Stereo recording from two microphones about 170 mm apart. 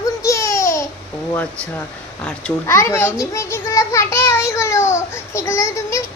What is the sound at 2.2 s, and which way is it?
A child's voice, 10° left (ahead or behind).